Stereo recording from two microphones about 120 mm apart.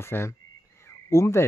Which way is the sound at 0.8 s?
25° left (ahead or behind).